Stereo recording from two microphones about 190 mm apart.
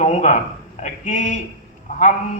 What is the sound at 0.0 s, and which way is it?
A man's voice, 40° left (ahead or behind).